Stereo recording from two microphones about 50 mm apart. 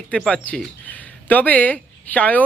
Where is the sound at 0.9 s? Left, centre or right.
Left.